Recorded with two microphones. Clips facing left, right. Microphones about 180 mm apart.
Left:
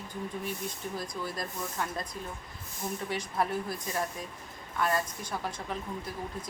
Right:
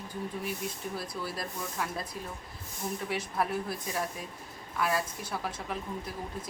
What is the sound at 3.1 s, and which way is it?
Speech, 5° right (ahead or behind).